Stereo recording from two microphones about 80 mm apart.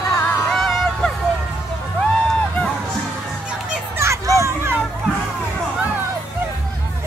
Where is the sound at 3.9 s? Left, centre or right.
Right.